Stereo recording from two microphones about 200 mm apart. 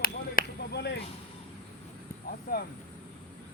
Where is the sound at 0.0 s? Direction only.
50° left (ahead or behind).